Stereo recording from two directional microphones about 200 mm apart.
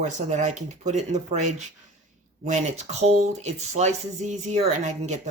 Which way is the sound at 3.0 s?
35° right (ahead or behind).